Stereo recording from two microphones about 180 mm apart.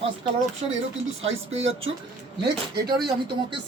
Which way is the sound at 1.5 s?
90° right.